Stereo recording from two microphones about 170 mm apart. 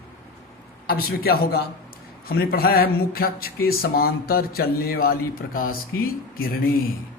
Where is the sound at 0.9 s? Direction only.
60° left (ahead or behind).